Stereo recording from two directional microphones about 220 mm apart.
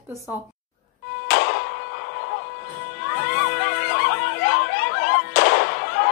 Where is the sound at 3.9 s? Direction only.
45° left (ahead or behind).